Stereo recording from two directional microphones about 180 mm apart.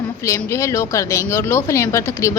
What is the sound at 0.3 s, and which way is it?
Speech, 15° left (ahead or behind).